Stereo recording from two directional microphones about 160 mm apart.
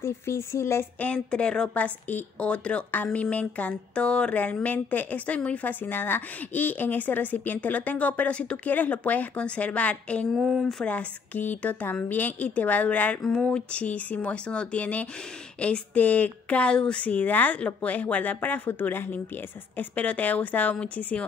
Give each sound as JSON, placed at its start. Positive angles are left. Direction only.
{"t": 0.0, "sound": "speech", "side_deg": 15}